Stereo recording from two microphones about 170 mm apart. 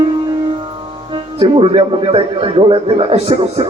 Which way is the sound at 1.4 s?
30° right (ahead or behind).